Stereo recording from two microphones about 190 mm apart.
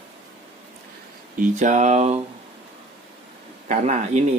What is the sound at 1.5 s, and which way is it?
Speech, 40° right (ahead or behind).